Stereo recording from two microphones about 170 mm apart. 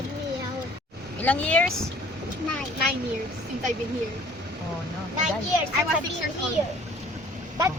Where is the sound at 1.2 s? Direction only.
10° left (ahead or behind).